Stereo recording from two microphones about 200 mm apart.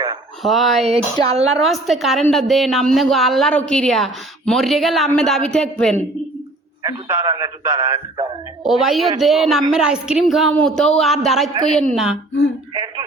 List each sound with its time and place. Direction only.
0.4 s a woman's voice: centre (ahead or behind)
0.9 s speech: 30° right (ahead or behind)
1.5 s a woman's voice: centre (ahead or behind)
6.8 s speech: 15° right (ahead or behind)
8.6 s a woman's voice: centre (ahead or behind)
12.7 s music: 20° right (ahead or behind)